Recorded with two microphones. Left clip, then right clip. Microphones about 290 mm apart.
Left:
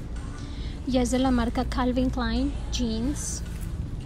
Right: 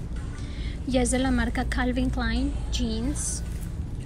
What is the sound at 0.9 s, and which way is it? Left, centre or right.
A woman's voice, centre.